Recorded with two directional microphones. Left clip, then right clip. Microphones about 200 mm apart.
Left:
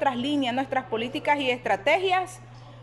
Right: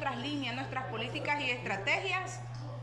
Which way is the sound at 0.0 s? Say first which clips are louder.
Left 10 dB; 35° left (ahead or behind).